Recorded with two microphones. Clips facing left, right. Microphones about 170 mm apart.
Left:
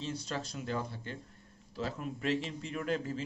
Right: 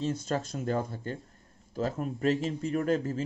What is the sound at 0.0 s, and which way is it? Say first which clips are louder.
Speech: right 7 dB; 50° right (ahead or behind).